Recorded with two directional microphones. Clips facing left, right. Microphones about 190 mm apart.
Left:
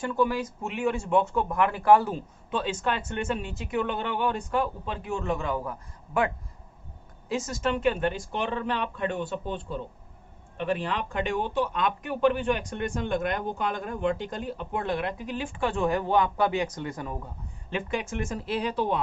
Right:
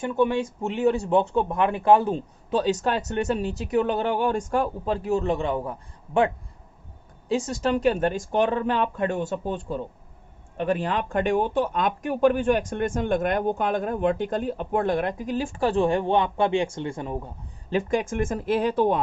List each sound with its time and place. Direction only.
0.0 s speech: 20° right (ahead or behind)
7.3 s speech: 30° right (ahead or behind)
17.7 s speech: 40° right (ahead or behind)